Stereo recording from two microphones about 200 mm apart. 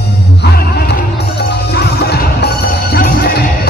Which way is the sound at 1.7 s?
55° left (ahead or behind).